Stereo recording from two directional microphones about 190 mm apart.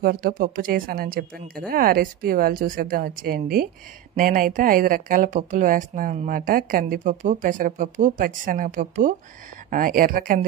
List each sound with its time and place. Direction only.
0.0 s a woman's voice: 45° right (ahead or behind)